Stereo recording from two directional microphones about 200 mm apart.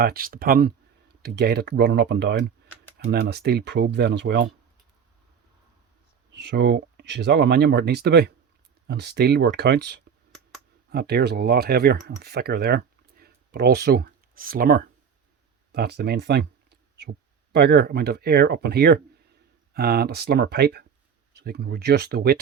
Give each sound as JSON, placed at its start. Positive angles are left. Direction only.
{"t": 0.0, "sound": "speech", "side_deg": -45}
{"t": 6.4, "sound": "speech", "side_deg": -60}